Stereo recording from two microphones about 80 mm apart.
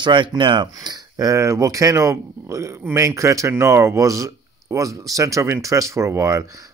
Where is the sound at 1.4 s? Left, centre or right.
Right.